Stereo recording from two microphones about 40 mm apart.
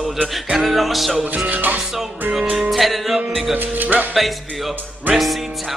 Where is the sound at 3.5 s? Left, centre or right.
Right.